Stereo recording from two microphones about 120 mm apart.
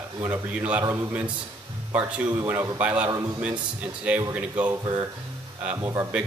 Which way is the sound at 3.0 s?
30° right (ahead or behind).